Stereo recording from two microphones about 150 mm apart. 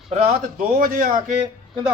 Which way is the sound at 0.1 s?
65° right (ahead or behind).